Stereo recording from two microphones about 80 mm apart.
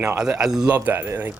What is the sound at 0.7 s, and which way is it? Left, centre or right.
Speech, right.